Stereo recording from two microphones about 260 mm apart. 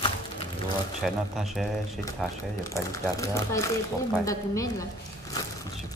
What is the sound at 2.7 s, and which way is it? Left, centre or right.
Speech, centre.